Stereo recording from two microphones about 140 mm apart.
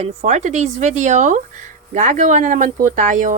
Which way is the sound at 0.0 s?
55° right (ahead or behind).